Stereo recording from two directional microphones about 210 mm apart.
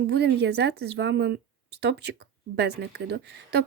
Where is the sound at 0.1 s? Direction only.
50° right (ahead or behind).